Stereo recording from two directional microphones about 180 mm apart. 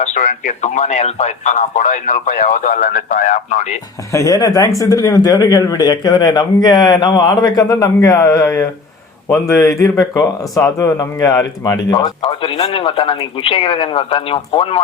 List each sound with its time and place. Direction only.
0.0 s speech: 45° left (ahead or behind)
4.1 s speech: 15° left (ahead or behind)